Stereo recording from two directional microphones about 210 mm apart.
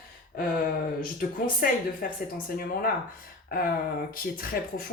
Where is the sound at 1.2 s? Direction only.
40° left (ahead or behind).